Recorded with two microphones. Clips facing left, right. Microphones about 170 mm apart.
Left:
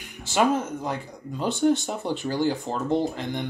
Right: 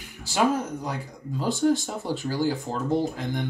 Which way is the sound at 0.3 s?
Centre (ahead or behind).